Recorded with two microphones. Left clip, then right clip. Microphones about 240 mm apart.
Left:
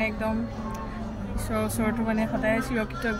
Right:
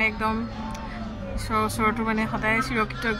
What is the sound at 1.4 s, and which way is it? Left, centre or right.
A woman's voice, centre.